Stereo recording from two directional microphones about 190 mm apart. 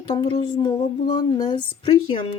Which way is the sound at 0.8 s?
40° left (ahead or behind).